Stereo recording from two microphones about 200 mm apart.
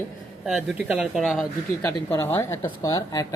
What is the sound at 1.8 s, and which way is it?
Speech, 10° left (ahead or behind).